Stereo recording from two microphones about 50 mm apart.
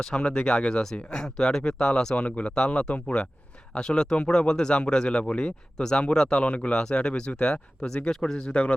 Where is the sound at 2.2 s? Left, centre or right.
Left; by 8.4 s centre.